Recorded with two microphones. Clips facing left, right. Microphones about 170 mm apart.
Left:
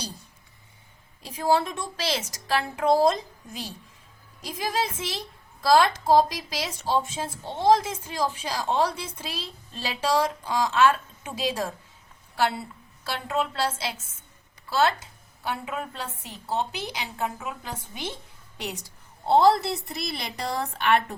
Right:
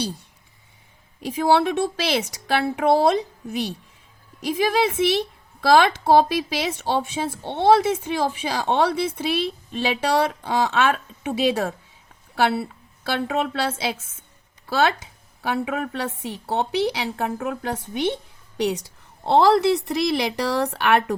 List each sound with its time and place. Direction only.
1.2 s a woman's voice: 70° right (ahead or behind)
14.7 s a woman's voice: 70° right (ahead or behind)